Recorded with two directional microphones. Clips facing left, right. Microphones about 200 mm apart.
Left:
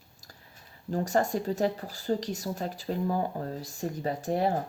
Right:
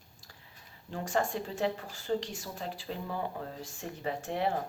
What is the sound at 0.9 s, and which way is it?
Speech, 40° left (ahead or behind).